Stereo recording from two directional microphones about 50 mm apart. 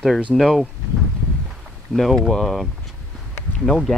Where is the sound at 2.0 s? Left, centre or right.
Centre.